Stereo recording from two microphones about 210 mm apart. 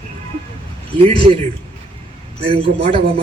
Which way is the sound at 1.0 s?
25° right (ahead or behind).